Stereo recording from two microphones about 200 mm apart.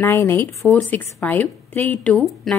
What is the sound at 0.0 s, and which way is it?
A woman's voice, 15° left (ahead or behind).